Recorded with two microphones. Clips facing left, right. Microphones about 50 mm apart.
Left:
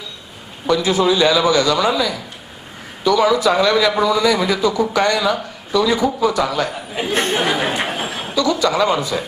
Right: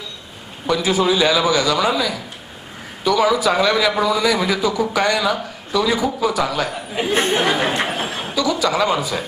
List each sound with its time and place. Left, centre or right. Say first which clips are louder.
0.7 s a man's voice: left 1 dB; centre
3.1 s a man's voice: left 2 dB; centre
6.4 s a sound: left 1 dB; centre
8.4 s a man's voice: left 2 dB; centre